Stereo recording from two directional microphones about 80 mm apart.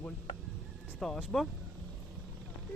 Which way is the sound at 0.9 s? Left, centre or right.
Centre.